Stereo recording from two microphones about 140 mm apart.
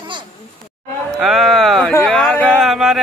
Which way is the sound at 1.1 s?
Centre (ahead or behind).